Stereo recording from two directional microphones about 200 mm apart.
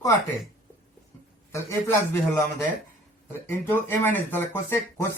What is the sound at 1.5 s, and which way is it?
Speech, 15° left (ahead or behind).